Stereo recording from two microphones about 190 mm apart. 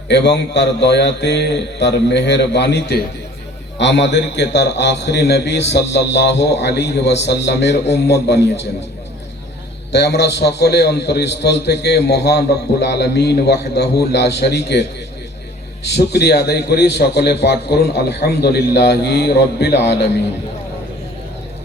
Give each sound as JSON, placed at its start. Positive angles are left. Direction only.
{"t": 0.1, "sound": "a man's voice", "side_deg": 65}
{"t": 9.9, "sound": "a man's voice", "side_deg": 60}